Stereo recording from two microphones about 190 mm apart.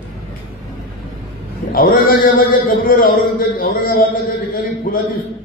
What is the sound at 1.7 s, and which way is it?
A man's voice, 50° left (ahead or behind).